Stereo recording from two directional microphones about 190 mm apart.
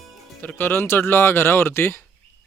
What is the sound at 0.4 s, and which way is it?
Speech, 10° left (ahead or behind).